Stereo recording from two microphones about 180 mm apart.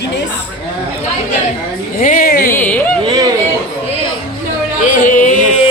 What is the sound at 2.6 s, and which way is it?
Speech, 10° left (ahead or behind).